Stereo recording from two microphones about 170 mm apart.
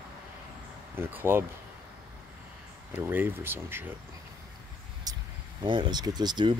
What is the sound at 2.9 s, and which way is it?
Speech, 10° right (ahead or behind).